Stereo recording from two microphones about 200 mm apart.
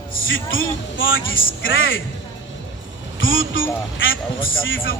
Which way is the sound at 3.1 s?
75° left (ahead or behind).